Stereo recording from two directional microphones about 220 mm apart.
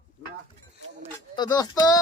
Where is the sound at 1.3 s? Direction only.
20° left (ahead or behind).